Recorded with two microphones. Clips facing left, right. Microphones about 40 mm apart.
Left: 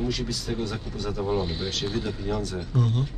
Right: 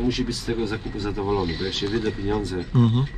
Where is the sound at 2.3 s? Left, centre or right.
Right.